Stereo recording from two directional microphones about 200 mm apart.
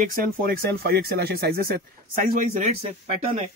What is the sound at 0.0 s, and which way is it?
Speech, 45° right (ahead or behind).